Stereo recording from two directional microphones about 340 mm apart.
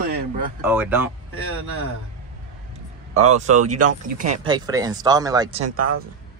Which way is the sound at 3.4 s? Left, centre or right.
Right.